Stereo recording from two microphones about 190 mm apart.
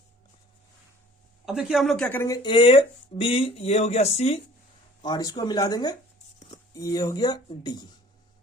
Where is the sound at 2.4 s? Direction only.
30° left (ahead or behind).